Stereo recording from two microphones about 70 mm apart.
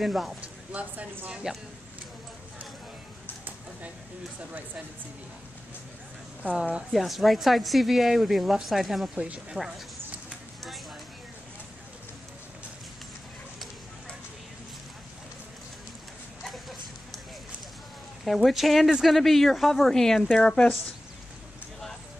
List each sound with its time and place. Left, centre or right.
0.0 s speech: centre
0.4 s speech: centre
1.3 s speech: centre
6.4 s speech: centre
6.9 s speech: centre
9.1 s speech: centre
16.4 s a sound: centre
18.2 s speech: centre